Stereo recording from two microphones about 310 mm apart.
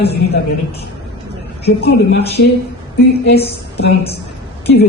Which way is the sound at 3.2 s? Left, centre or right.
Left.